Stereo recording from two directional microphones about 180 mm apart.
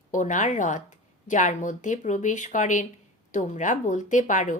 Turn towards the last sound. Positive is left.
turn(degrees=45)  # may be behind; listen again after turning